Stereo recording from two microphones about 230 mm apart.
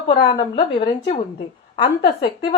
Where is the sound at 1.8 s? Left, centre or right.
Left.